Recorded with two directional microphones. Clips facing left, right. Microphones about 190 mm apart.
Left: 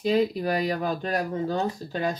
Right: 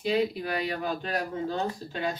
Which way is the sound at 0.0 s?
40° left (ahead or behind).